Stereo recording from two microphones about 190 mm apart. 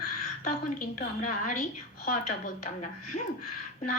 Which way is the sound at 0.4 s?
45° left (ahead or behind).